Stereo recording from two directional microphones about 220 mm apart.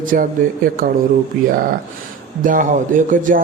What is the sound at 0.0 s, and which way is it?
Speech, 40° right (ahead or behind).